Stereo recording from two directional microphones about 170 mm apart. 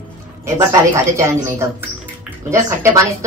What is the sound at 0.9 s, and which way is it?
Speech, 15° right (ahead or behind).